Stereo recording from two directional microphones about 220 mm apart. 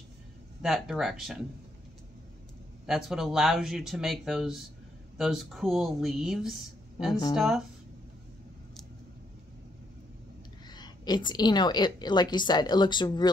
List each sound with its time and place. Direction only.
0.6 s speech: centre (ahead or behind)
2.9 s speech: centre (ahead or behind)
10.7 s a woman's voice: 20° left (ahead or behind)